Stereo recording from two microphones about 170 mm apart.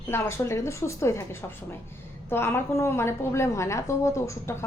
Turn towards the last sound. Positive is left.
turn(degrees=15)  # may be behind; listen again after turning